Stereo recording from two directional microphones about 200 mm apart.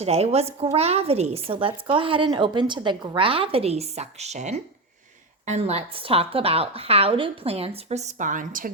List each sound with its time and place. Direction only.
0.0 s a woman's voice: 30° right (ahead or behind)